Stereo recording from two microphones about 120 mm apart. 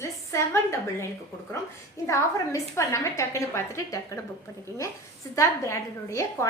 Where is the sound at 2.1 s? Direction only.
25° left (ahead or behind).